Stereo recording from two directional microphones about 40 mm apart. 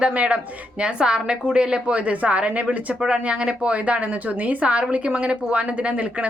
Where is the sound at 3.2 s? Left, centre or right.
Right.